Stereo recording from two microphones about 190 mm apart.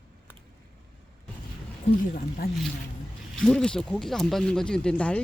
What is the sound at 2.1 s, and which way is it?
Speech, 45° left (ahead or behind).